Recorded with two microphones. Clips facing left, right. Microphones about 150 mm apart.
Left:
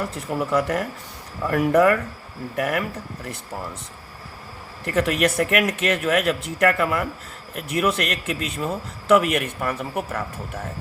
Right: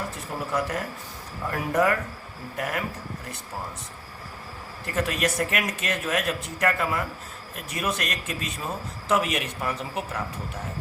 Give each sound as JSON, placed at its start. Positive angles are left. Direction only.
{"t": 0.1, "sound": "a man's voice", "side_deg": 70}
{"t": 4.9, "sound": "a man's voice", "side_deg": 60}